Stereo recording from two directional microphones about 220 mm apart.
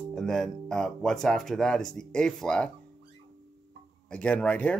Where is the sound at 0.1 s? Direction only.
Centre (ahead or behind).